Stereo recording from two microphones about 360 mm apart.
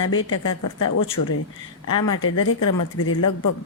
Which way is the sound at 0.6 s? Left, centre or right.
Left.